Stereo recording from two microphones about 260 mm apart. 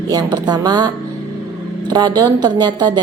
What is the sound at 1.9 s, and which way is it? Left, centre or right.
Speech, centre.